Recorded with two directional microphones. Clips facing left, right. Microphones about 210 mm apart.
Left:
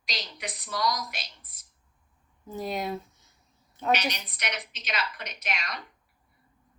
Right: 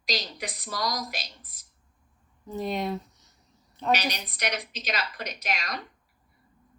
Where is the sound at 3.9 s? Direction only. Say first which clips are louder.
Right 1 dB; 35° right (ahead or behind).